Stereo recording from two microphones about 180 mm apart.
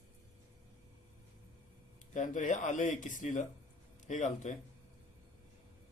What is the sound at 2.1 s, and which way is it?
Speech, 45° left (ahead or behind).